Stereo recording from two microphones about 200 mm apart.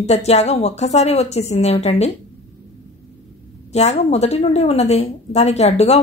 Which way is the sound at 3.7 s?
35° left (ahead or behind).